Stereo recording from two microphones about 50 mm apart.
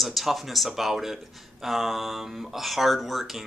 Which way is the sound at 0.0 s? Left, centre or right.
Centre.